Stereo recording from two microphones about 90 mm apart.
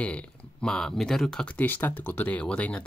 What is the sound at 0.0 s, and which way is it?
Speech, 10° left (ahead or behind).